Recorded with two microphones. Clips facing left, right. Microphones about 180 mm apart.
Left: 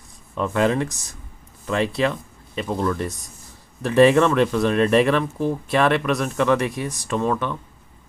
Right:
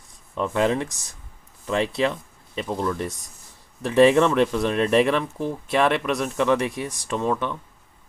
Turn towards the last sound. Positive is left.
turn(degrees=-20)  # may be behind; listen again after turning